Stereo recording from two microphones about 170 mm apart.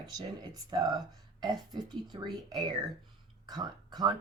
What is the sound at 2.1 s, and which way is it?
Speech, 25° right (ahead or behind).